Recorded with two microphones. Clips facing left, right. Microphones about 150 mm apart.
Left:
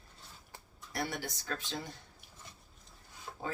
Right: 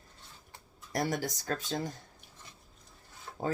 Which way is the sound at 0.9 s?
45° right (ahead or behind).